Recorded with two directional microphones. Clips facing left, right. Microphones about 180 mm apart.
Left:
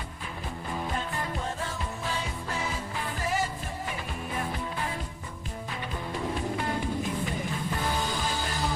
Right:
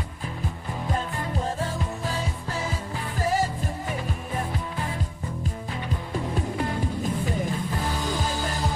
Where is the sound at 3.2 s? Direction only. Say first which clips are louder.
Right 6 dB; 40° right (ahead or behind).